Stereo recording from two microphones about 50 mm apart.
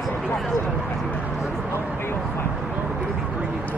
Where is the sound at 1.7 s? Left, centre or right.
Left.